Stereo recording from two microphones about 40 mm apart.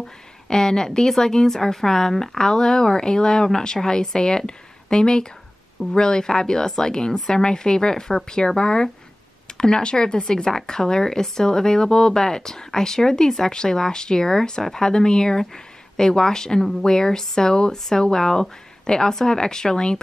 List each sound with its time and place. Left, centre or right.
0.5 s speech: centre